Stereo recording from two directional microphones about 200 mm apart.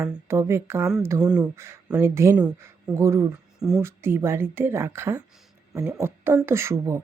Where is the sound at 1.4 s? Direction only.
15° right (ahead or behind).